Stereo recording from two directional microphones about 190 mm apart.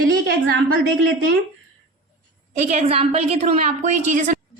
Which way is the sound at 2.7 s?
35° right (ahead or behind).